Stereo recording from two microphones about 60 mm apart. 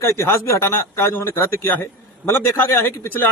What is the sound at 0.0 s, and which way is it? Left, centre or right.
Speech, left.